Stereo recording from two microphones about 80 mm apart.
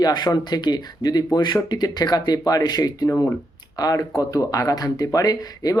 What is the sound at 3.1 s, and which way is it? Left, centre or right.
Speech, left.